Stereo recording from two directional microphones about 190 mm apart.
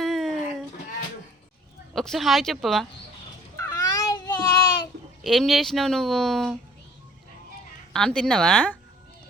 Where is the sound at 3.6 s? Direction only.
20° left (ahead or behind).